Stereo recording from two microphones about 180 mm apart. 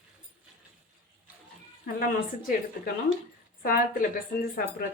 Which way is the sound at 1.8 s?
50° left (ahead or behind).